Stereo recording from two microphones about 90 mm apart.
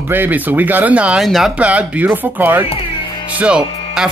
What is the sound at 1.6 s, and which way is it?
Speech, 15° right (ahead or behind).